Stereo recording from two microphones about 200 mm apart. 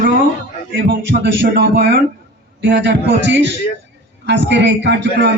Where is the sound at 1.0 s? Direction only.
60° right (ahead or behind).